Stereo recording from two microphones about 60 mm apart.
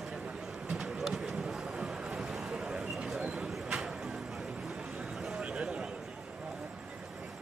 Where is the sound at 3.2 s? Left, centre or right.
Centre.